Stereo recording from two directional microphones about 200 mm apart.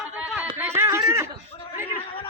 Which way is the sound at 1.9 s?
25° left (ahead or behind).